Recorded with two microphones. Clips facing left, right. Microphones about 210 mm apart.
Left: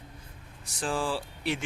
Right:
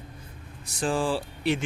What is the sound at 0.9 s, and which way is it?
Speech, 20° right (ahead or behind).